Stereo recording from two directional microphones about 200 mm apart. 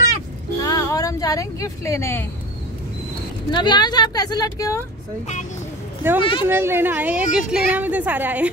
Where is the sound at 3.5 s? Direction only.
20° left (ahead or behind).